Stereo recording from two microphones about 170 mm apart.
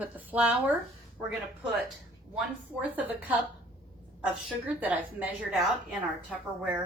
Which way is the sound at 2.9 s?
10° right (ahead or behind).